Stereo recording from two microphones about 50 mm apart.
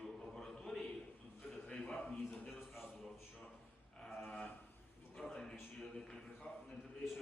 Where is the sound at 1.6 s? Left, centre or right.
Centre.